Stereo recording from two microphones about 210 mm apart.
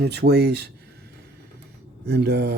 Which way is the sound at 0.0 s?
50° right (ahead or behind).